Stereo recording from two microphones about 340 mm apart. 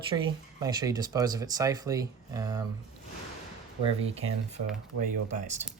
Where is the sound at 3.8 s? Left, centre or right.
Centre.